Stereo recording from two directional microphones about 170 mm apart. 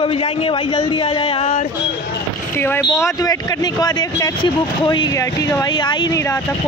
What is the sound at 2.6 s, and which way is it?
Speech, 15° left (ahead or behind).